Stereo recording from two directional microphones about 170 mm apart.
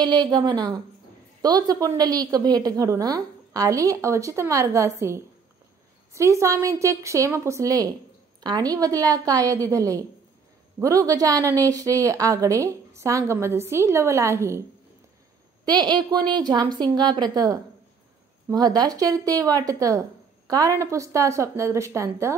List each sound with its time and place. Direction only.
0.0 s a woman's voice: 25° right (ahead or behind)
11.1 s a woman's voice: 20° right (ahead or behind)
15.6 s a woman's voice: 25° right (ahead or behind)